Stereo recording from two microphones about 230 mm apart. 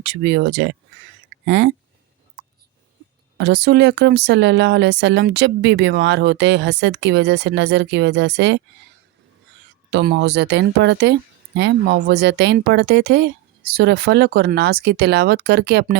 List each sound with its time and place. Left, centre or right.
0.0 s speech: right
3.3 s speech: right
9.9 s speech: right